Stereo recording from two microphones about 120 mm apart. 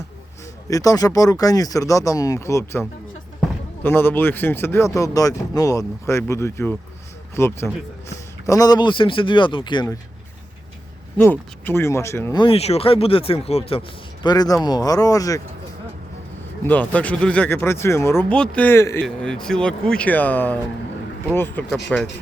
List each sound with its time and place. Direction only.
0.7 s speech: 30° left (ahead or behind)
3.8 s speech: 20° left (ahead or behind); by 9.9 s 40° left (ahead or behind)
11.2 s speech: 20° left (ahead or behind)
12.5 s speech: 60° left (ahead or behind)
14.3 s speech: 30° left (ahead or behind)
16.6 s speech: 15° left (ahead or behind)
18.8 s speech: 25° left (ahead or behind)
19.0 s speech: 5° left (ahead or behind)
21.7 s speech: 5° left (ahead or behind)